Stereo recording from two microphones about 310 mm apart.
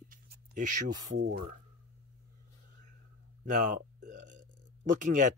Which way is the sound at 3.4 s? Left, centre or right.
Right.